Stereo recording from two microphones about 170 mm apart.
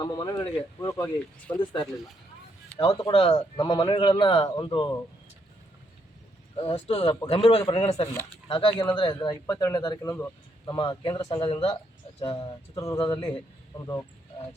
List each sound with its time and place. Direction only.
0.0 s a man's voice: 25° left (ahead or behind)
6.6 s speech: 35° left (ahead or behind)
8.0 s speech: 15° left (ahead or behind)
8.4 s a man's voice: 30° left (ahead or behind)